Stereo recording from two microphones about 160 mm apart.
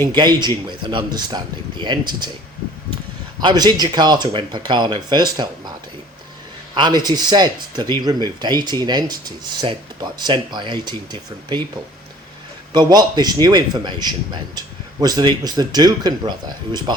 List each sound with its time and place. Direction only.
0.1 s speech: 25° right (ahead or behind)
3.4 s speech: 25° right (ahead or behind)
6.7 s speech: 25° right (ahead or behind)
12.7 s speech: 25° right (ahead or behind)